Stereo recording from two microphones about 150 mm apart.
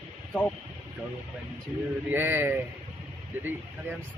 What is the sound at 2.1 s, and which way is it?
Speech, 15° right (ahead or behind).